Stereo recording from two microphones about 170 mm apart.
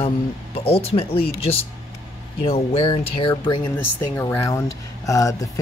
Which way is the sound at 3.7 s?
10° left (ahead or behind).